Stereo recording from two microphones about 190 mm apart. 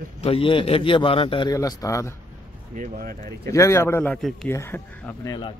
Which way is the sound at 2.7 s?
45° right (ahead or behind).